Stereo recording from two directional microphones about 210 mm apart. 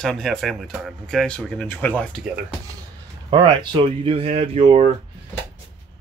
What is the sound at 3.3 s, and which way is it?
Speech, 20° right (ahead or behind).